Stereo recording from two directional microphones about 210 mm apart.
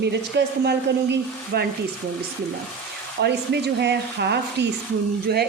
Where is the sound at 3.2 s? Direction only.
55° right (ahead or behind).